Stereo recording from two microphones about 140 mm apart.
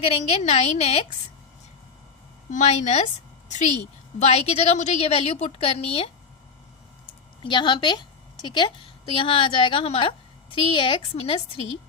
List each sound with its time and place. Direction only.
0.0 s a woman's voice: 45° left (ahead or behind)
2.5 s a woman's voice: 55° left (ahead or behind)
4.2 s a woman's voice: 45° left (ahead or behind)
7.4 s a woman's voice: 35° left (ahead or behind)